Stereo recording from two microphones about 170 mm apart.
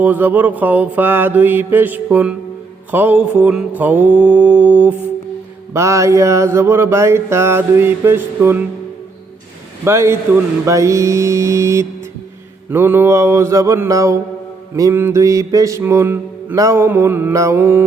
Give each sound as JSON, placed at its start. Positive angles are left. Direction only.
{"t": 0.0, "sound": "mantra", "side_deg": -10}
{"t": 9.8, "sound": "mantra", "side_deg": -15}